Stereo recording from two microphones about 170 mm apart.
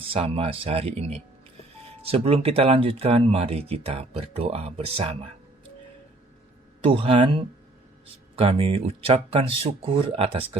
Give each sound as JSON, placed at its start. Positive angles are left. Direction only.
{"t": 0.1, "sound": "speech", "side_deg": -35}
{"t": 6.8, "sound": "speech", "side_deg": -30}